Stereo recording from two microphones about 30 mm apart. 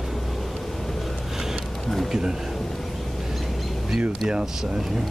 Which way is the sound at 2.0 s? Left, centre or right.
Right.